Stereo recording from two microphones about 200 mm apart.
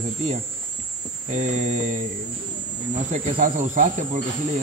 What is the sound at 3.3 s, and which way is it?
Speech, 40° right (ahead or behind).